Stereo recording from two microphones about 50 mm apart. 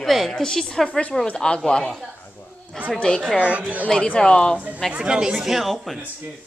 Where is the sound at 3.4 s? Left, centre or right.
Right.